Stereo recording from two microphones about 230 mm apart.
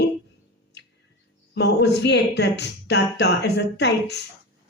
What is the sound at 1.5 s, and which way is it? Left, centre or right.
Speech, left.